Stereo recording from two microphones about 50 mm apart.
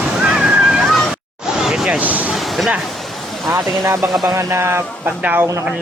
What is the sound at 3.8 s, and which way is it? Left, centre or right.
Speech, right.